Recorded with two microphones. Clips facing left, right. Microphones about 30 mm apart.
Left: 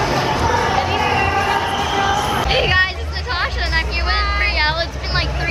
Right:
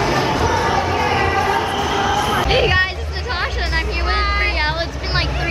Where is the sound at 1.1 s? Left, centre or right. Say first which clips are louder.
Even; centre.